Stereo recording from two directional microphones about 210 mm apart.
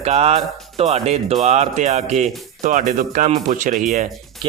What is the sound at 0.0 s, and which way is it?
Speech, 30° right (ahead or behind).